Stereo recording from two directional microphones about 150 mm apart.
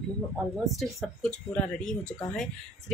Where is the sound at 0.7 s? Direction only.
Centre (ahead or behind).